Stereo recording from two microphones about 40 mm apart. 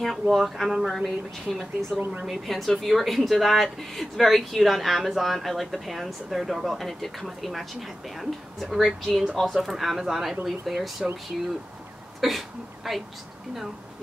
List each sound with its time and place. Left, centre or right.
0.0 s speech: centre
2.0 s speech: right
2.2 s speech: centre
12.2 s a sound: centre